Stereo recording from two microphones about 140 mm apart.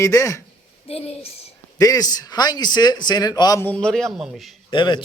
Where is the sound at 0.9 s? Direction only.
45° left (ahead or behind).